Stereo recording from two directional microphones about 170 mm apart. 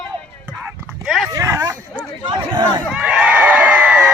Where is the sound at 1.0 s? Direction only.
Centre (ahead or behind).